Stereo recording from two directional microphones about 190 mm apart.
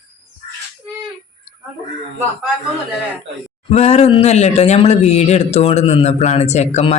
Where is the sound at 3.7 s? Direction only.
35° left (ahead or behind).